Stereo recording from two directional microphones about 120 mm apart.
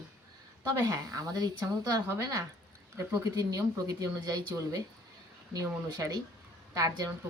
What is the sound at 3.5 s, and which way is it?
Speech, 30° right (ahead or behind).